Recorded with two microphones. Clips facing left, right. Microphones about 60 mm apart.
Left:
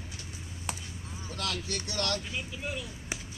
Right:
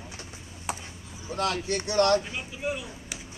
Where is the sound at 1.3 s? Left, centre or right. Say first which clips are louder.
Right 8 dB; right.